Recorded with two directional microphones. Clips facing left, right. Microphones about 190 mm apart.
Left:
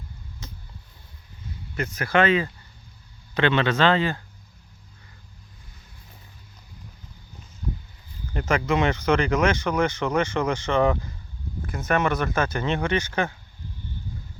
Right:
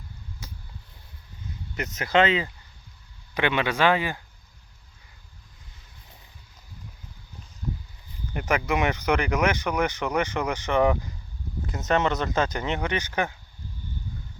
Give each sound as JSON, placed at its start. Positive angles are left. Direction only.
{"t": 0.4, "sound": "a sound", "side_deg": -10}
{"t": 1.7, "sound": "speech", "side_deg": -20}
{"t": 8.3, "sound": "speech", "side_deg": -15}